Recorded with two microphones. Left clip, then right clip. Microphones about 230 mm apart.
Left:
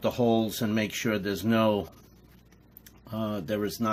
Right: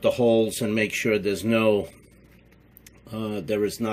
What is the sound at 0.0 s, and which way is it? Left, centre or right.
Speech, left.